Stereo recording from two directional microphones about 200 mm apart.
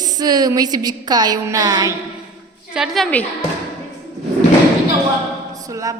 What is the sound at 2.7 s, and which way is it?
Speech, centre (ahead or behind).